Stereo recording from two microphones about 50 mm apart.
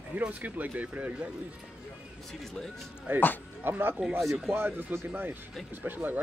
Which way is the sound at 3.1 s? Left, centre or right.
Right.